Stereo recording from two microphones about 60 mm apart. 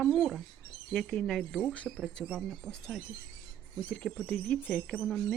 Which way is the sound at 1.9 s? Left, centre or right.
Left.